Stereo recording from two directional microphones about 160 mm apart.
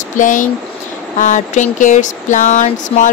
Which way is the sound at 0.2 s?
55° left (ahead or behind).